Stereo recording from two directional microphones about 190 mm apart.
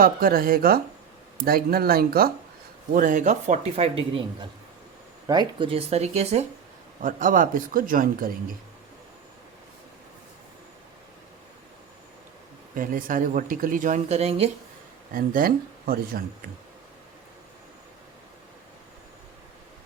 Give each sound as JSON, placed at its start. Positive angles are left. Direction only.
{"t": 0.0, "sound": "speech", "side_deg": -50}
{"t": 7.0, "sound": "speech", "side_deg": -45}
{"t": 12.7, "sound": "speech", "side_deg": -45}
{"t": 15.1, "sound": "speech", "side_deg": -50}